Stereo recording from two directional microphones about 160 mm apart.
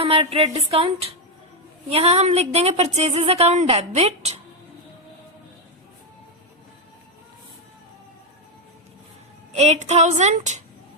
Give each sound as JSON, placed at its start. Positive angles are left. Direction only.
{"t": 0.0, "sound": "a sound", "side_deg": -35}
{"t": 1.9, "sound": "a woman's voice", "side_deg": -40}
{"t": 9.6, "sound": "a woman's voice", "side_deg": -45}